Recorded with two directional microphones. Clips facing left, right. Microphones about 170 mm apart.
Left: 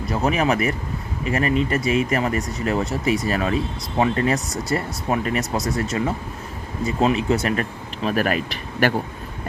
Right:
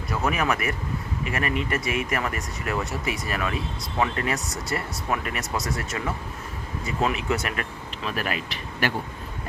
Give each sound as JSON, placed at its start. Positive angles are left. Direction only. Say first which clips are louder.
{"t": 0.1, "sound": "speech", "louder": "left 5 dB", "side_deg": 30}